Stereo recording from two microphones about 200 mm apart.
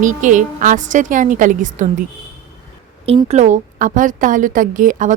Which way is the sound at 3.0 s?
30° right (ahead or behind).